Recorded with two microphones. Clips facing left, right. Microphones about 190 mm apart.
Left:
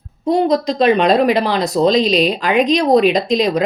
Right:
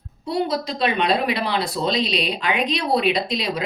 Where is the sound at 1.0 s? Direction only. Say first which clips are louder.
Left 8 dB; 45° left (ahead or behind).